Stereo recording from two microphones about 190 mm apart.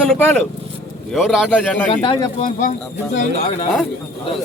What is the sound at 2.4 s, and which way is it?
A man's voice, 45° left (ahead or behind).